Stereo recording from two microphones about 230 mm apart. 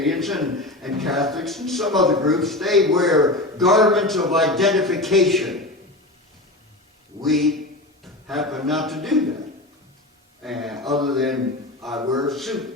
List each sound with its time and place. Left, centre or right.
0.0 s a man's voice: centre
7.3 s a man's voice: centre
10.4 s a man's voice: centre